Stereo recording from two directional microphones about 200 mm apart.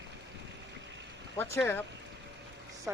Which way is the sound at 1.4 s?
10° left (ahead or behind).